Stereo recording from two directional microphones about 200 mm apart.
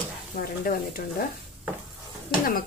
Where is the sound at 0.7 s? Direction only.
50° left (ahead or behind).